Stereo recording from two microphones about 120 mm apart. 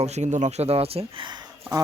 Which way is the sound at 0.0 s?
70° right (ahead or behind).